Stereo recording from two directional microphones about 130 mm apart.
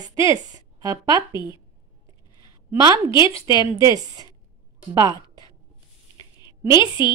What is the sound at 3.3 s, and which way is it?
Speech, 40° left (ahead or behind).